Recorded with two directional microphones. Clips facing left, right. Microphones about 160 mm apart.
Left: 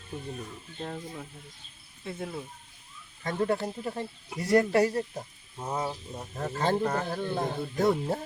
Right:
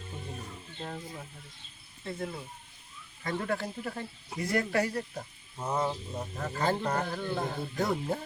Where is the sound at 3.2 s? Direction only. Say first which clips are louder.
Left 4 dB; 30° left (ahead or behind).